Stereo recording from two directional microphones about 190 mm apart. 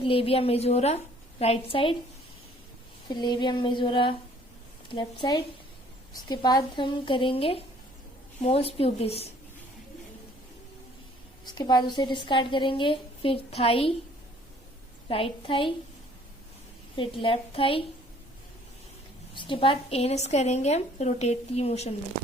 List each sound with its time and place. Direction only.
0.0 s a woman's voice: 30° left (ahead or behind)
3.1 s a woman's voice: 20° left (ahead or behind)
11.4 s a woman's voice: 20° left (ahead or behind)
15.1 s a woman's voice: 30° left (ahead or behind)
17.0 s a woman's voice: 25° left (ahead or behind)
19.4 s a woman's voice: 25° left (ahead or behind)